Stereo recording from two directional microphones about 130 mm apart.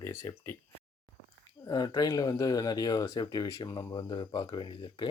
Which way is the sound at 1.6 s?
30° left (ahead or behind).